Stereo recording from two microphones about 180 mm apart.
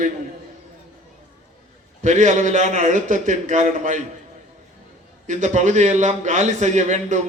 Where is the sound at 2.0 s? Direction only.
40° right (ahead or behind).